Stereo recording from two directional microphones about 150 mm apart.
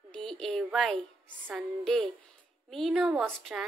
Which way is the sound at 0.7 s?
Centre (ahead or behind).